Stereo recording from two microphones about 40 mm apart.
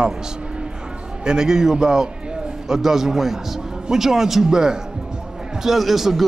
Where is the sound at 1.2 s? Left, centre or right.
Centre.